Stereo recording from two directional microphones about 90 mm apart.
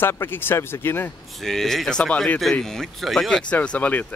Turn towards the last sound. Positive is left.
turn(degrees=15)  # may be behind; listen again after turning